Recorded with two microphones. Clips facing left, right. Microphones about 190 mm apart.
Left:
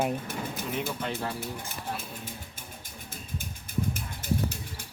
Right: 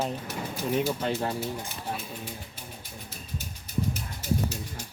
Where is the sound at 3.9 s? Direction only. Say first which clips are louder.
Right 1 dB; 55° left (ahead or behind).